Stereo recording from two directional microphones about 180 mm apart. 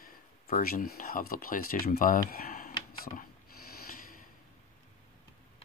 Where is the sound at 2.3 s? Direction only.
55° left (ahead or behind).